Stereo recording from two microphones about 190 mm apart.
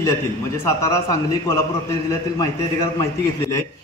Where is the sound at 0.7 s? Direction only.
15° left (ahead or behind).